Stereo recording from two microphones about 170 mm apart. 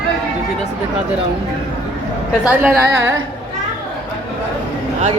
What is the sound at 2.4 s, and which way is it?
Speech, 10° right (ahead or behind).